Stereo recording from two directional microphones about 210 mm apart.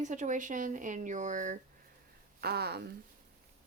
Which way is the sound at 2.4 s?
50° right (ahead or behind).